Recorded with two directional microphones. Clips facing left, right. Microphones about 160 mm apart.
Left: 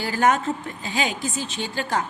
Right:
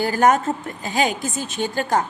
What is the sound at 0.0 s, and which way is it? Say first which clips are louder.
A woman's voice: right 4 dB; 45° right (ahead or behind).